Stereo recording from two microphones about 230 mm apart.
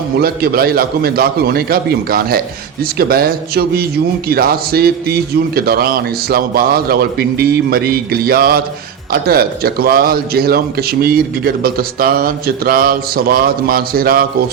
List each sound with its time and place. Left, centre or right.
0.2 s a man's voice: right